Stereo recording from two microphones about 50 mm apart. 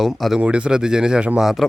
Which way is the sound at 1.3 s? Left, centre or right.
Centre.